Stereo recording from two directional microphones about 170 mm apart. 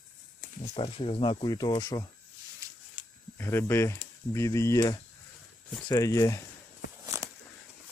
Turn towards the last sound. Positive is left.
turn(degrees=-20)  # may be behind; listen again after turning